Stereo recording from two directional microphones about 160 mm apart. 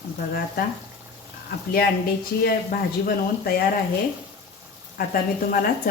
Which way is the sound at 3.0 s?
70° left (ahead or behind).